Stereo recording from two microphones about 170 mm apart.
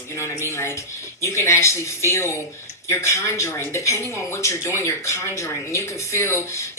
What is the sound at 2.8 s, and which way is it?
Speech, 15° left (ahead or behind).